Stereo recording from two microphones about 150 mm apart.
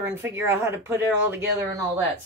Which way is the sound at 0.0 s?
15° right (ahead or behind).